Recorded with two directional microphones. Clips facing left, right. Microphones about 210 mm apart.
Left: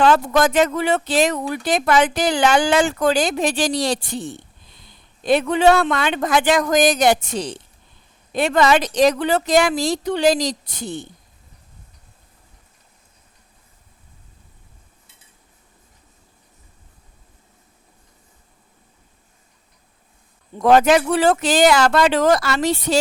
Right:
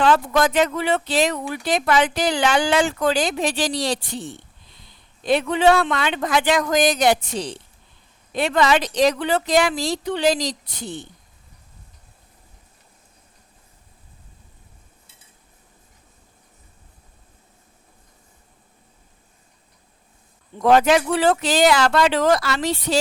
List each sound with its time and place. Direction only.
0.0 s speech: 45° left (ahead or behind)
20.6 s speech: 45° left (ahead or behind)